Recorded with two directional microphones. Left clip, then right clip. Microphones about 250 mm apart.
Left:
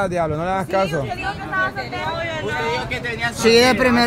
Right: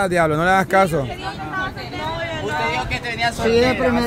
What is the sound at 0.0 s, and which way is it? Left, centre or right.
Speech, right.